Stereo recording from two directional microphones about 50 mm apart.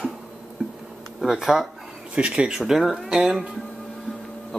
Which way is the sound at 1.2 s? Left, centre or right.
Centre.